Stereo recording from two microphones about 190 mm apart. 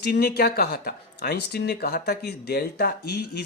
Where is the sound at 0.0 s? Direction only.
55° left (ahead or behind).